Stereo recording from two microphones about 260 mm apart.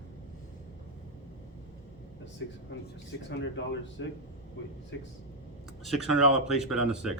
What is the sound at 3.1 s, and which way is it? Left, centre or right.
A man's voice, left.